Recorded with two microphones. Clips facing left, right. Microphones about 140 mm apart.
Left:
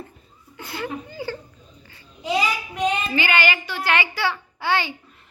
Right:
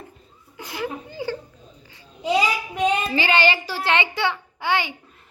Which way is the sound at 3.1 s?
30° right (ahead or behind).